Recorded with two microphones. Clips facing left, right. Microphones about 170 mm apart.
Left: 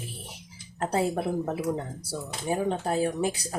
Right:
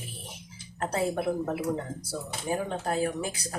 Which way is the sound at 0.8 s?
30° left (ahead or behind).